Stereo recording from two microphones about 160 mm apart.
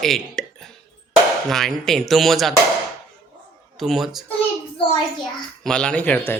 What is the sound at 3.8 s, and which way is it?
Speech, centre (ahead or behind).